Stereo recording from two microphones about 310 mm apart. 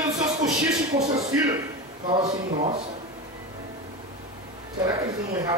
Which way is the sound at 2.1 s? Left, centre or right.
Centre.